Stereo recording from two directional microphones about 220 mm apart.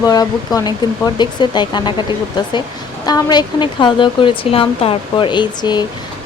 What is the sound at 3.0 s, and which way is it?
Speech, 20° left (ahead or behind).